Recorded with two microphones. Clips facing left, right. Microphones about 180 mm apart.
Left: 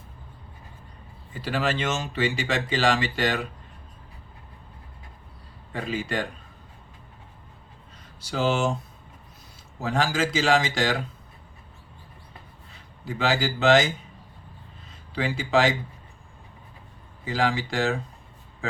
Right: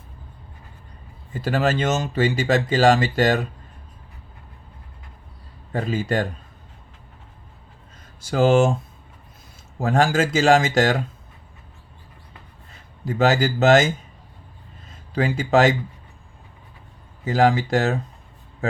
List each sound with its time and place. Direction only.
1.3 s speech: 45° right (ahead or behind)
5.7 s speech: 40° right (ahead or behind)
8.2 s speech: 50° right (ahead or behind)
9.7 s speech: 50° right (ahead or behind)
13.1 s speech: 45° right (ahead or behind)
15.1 s speech: 45° right (ahead or behind)
17.2 s speech: 45° right (ahead or behind)